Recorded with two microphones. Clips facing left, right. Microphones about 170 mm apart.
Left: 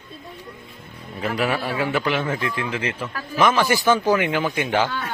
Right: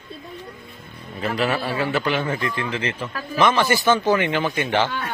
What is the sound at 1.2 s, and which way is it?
A man's voice, 10° left (ahead or behind).